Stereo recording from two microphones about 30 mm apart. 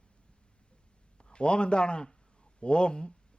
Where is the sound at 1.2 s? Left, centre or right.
Left.